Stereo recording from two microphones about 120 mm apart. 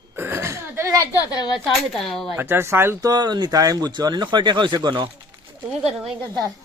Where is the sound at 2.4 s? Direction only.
20° right (ahead or behind); by 5.1 s 40° right (ahead or behind).